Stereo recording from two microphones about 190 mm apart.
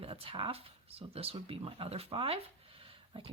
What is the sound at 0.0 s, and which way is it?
Speech, 30° right (ahead or behind).